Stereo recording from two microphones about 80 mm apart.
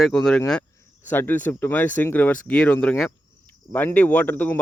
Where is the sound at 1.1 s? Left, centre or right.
Left.